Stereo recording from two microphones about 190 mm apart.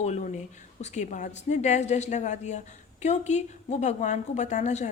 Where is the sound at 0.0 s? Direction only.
35° left (ahead or behind).